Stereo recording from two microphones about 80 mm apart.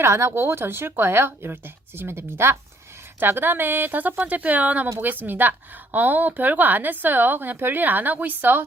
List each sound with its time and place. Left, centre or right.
0.0 s speech: right